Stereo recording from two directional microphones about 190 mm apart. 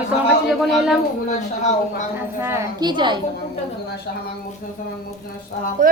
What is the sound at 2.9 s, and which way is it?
Speech, 25° right (ahead or behind).